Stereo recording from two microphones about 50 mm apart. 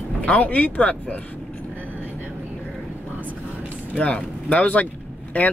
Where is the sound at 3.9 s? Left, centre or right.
Left.